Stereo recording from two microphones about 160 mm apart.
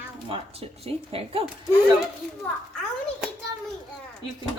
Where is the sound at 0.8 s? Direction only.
35° right (ahead or behind).